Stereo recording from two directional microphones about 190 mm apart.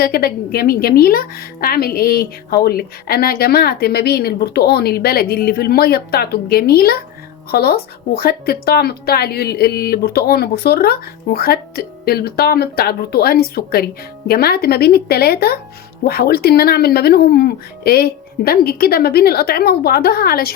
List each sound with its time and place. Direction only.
0.0 s speech: 50° left (ahead or behind)